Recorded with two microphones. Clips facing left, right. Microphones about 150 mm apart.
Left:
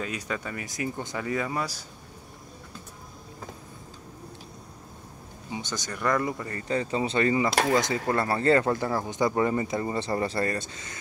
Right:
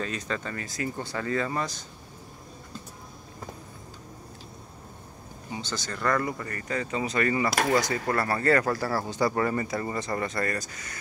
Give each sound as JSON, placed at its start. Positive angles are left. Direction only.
{"t": 0.0, "sound": "speech", "side_deg": 10}
{"t": 5.5, "sound": "speech", "side_deg": 15}
{"t": 6.7, "sound": "speech", "side_deg": 30}